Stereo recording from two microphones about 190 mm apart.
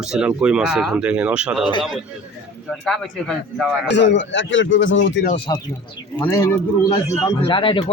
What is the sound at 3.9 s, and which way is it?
Speech, 70° left (ahead or behind).